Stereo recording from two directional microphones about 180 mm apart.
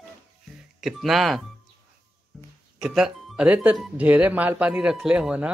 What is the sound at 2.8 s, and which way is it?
Speech, 5° right (ahead or behind).